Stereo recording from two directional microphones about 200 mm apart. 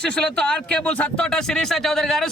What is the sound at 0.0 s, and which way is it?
Speech, 5° left (ahead or behind).